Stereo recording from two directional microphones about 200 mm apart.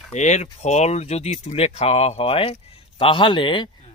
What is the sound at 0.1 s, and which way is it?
Speech, 35° left (ahead or behind).